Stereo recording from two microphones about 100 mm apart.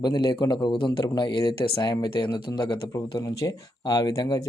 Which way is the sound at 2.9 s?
40° left (ahead or behind).